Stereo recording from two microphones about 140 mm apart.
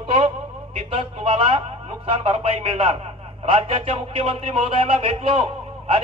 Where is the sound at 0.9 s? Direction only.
40° right (ahead or behind).